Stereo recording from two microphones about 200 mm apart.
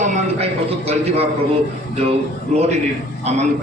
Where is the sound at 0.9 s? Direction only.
30° right (ahead or behind).